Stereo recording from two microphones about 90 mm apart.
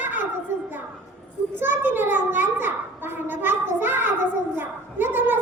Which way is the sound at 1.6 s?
25° right (ahead or behind).